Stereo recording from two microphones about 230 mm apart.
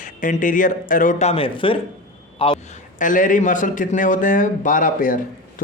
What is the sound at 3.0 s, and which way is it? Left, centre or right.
A man's voice, left.